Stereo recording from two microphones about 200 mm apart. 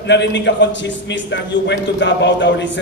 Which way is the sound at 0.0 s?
60° left (ahead or behind).